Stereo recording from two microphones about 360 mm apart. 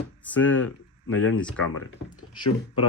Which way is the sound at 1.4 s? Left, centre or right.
Centre.